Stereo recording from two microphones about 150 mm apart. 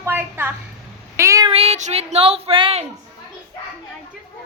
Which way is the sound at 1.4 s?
45° right (ahead or behind).